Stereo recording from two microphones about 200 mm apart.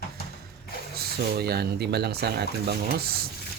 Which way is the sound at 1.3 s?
50° right (ahead or behind).